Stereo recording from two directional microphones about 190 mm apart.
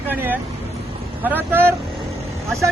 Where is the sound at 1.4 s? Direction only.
10° right (ahead or behind).